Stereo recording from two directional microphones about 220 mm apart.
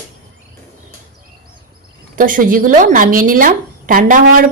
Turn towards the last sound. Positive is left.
turn(degrees=-40)  # may be behind; listen again after turning